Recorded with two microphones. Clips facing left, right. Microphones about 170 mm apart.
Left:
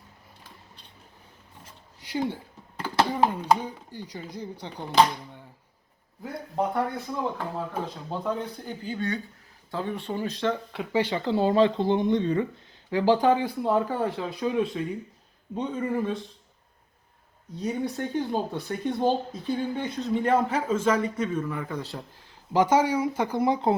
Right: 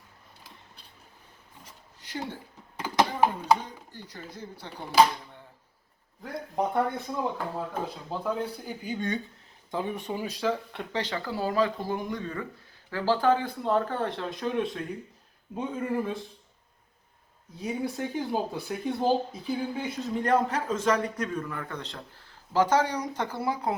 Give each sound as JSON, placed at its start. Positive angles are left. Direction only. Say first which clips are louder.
{"t": 2.0, "sound": "a sound", "louder": "left 7 dB", "side_deg": 15}
{"t": 2.7, "sound": "a sound", "louder": "left 1 dB", "side_deg": -15}
{"t": 3.6, "sound": "speech", "louder": "left 6 dB", "side_deg": 10}
{"t": 6.2, "sound": "speech", "louder": "left 1 dB", "side_deg": 5}
{"t": 6.6, "sound": "speech", "louder": "even", "side_deg": -20}
{"t": 7.7, "sound": "speech", "louder": "left 1 dB", "side_deg": -5}
{"t": 11.0, "sound": "speech", "louder": "left 7 dB", "side_deg": 20}
{"t": 17.6, "sound": "speech", "louder": "left 2 dB", "side_deg": -5}